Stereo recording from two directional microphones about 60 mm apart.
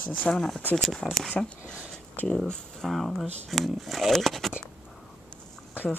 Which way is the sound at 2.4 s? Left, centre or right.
Centre.